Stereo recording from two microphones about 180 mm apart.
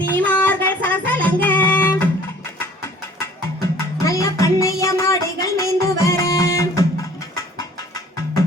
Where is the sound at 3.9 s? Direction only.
15° left (ahead or behind).